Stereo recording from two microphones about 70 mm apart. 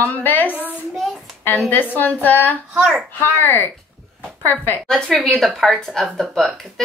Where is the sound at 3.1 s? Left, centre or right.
Left.